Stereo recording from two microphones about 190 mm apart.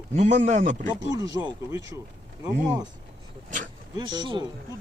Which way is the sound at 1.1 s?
20° right (ahead or behind).